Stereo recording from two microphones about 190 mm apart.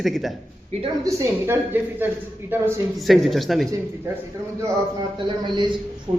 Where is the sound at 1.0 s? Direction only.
15° right (ahead or behind).